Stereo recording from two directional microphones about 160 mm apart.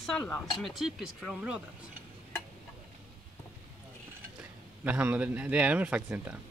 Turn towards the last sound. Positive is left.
turn(degrees=-10)  # may be behind; listen again after turning